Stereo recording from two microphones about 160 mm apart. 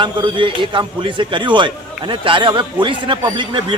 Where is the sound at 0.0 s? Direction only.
30° right (ahead or behind).